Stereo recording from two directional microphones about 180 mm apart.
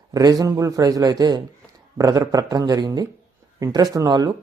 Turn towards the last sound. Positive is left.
turn(degrees=-20)  # may be behind; listen again after turning